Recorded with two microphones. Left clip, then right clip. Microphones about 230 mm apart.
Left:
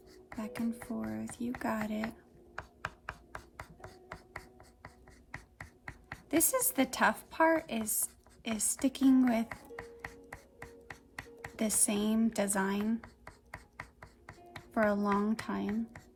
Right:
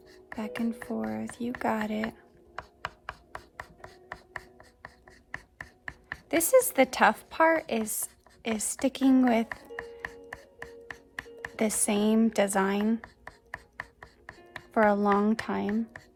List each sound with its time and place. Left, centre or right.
0.3 s a woman's voice: right
6.2 s a woman's voice: right
11.5 s a woman's voice: right
14.7 s a woman's voice: right